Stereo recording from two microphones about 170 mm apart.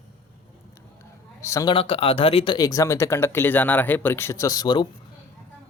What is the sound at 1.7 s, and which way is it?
Speech, 35° left (ahead or behind).